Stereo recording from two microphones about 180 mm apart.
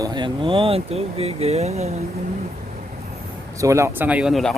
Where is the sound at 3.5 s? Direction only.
15° right (ahead or behind); by 4.6 s centre (ahead or behind).